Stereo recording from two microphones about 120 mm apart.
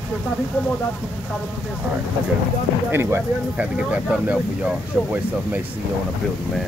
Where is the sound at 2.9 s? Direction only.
20° right (ahead or behind).